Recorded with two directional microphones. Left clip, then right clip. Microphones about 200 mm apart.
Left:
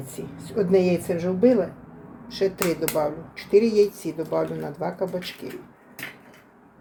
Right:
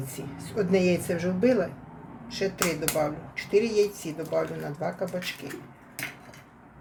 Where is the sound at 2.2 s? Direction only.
20° left (ahead or behind).